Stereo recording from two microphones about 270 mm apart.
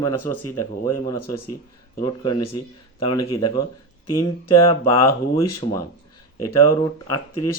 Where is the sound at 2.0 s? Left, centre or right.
Centre.